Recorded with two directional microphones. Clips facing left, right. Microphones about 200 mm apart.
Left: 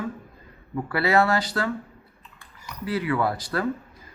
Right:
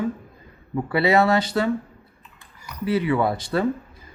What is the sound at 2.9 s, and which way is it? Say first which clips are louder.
Speech: right 4 dB; 25° right (ahead or behind).